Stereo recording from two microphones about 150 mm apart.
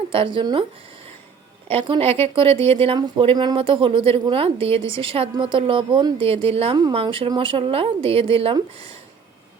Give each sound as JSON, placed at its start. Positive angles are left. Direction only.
{"t": 0.1, "sound": "speech", "side_deg": -35}
{"t": 1.6, "sound": "speech", "side_deg": -40}